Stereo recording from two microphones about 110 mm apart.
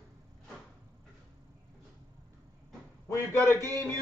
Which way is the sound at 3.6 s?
35° right (ahead or behind).